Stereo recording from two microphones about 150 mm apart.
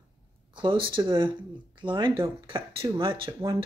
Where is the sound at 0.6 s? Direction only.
35° right (ahead or behind).